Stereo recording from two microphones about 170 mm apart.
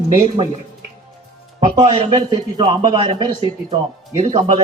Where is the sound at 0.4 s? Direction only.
35° right (ahead or behind).